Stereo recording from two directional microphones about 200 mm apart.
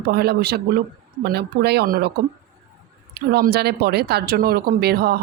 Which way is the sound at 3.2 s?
50° right (ahead or behind).